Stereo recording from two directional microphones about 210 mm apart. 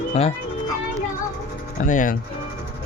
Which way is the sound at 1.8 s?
40° left (ahead or behind).